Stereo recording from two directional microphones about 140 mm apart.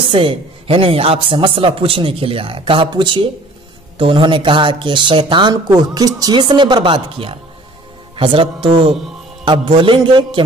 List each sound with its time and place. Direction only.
0.1 s a man's voice: 40° right (ahead or behind)